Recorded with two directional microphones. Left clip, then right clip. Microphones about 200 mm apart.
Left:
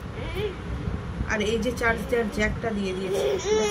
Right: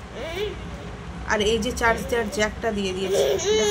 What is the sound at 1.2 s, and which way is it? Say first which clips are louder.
A woman's voice: right 4 dB; 35° right (ahead or behind).